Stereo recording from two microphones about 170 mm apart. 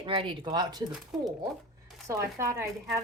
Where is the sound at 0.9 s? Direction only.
5° right (ahead or behind).